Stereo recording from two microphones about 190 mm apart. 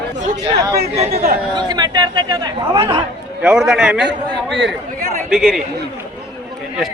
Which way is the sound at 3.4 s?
5° right (ahead or behind).